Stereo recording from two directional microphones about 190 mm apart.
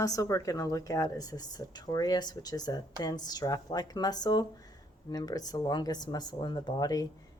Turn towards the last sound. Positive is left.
turn(degrees=20)  # may be behind; listen again after turning